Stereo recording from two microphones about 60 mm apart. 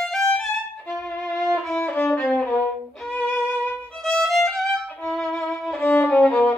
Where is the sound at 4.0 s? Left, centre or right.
Centre.